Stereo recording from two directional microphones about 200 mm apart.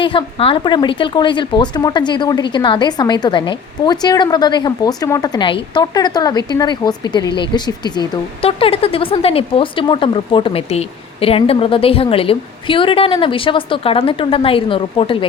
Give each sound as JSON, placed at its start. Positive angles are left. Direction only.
{"t": 0.0, "sound": "speech", "side_deg": 25}